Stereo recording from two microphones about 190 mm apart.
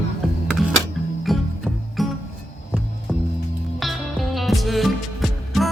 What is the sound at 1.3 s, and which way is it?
Music, centre (ahead or behind).